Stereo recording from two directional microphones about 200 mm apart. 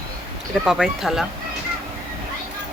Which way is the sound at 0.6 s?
Centre (ahead or behind).